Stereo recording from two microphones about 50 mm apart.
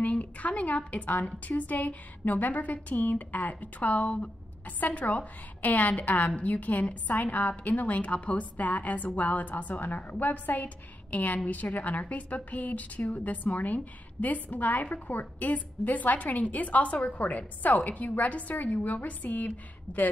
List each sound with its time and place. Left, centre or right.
0.0 s a woman's voice: left